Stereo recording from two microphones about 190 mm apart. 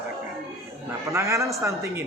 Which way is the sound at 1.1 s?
15° right (ahead or behind).